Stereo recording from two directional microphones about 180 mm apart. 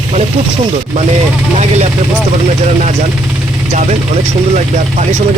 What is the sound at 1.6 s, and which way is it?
Speech, 40° right (ahead or behind).